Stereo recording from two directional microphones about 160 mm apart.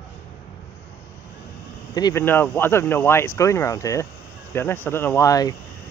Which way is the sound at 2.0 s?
25° left (ahead or behind).